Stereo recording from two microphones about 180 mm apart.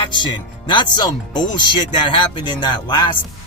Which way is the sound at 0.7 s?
25° left (ahead or behind).